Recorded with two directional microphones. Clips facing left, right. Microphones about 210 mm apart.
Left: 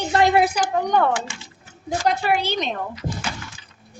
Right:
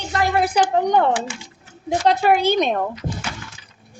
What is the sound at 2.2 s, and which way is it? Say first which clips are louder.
Speech: right 6 dB; 50° right (ahead or behind).